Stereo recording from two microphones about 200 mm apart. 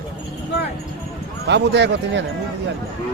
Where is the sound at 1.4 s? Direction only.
60° right (ahead or behind).